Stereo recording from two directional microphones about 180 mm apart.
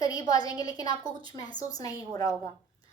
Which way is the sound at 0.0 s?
20° left (ahead or behind).